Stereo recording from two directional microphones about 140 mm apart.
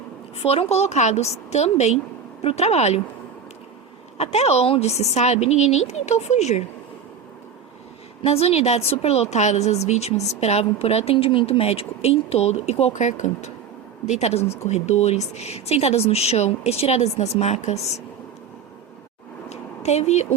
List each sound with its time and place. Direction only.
0.3 s a woman's voice: 45° left (ahead or behind)
4.2 s a woman's voice: 50° left (ahead or behind)
8.2 s a woman's voice: 45° left (ahead or behind)
19.5 s a sound: 55° left (ahead or behind)